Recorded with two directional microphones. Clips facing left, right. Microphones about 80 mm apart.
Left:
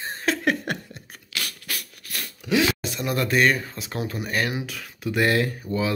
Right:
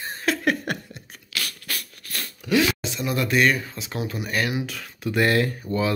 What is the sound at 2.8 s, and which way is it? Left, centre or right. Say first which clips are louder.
Speech: even; left.